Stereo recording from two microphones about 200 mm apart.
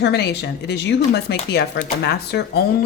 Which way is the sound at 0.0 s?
55° left (ahead or behind).